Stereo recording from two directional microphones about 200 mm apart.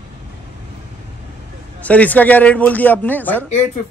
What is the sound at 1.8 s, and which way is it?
Speech, 5° left (ahead or behind).